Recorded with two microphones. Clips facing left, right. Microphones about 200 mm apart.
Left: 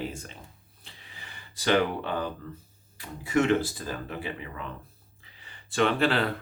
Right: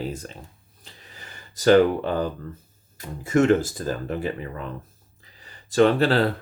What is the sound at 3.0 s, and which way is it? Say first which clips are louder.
Speech: right 5 dB; 45° right (ahead or behind).